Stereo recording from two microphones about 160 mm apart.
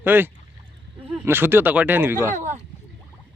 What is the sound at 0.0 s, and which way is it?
A man's voice, 10° right (ahead or behind).